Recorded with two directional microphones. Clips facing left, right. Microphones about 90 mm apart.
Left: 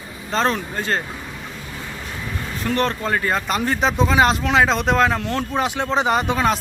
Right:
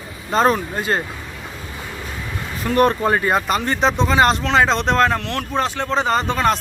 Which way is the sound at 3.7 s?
5° left (ahead or behind).